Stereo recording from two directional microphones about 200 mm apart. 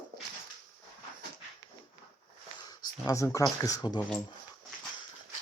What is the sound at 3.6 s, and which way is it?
Speech, 20° left (ahead or behind).